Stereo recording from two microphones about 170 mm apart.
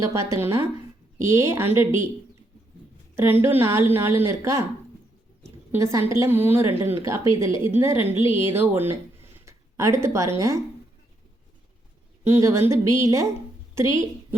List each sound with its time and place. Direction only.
0.0 s a woman's voice: 15° right (ahead or behind)
3.2 s a woman's voice: 15° right (ahead or behind)
5.7 s a woman's voice: 15° right (ahead or behind)
12.2 s a woman's voice: 15° right (ahead or behind)